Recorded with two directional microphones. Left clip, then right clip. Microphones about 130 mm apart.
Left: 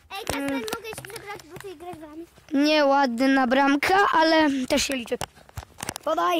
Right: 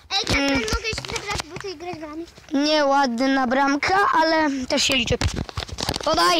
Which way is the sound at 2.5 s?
35° left (ahead or behind).